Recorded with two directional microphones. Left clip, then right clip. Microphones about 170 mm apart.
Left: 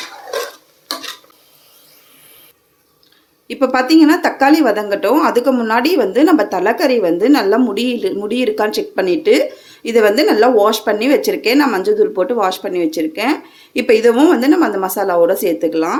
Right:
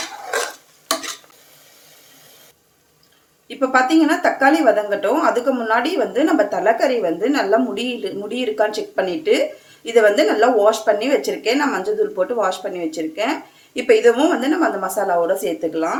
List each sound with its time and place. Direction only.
3.4 s speech: 60° left (ahead or behind)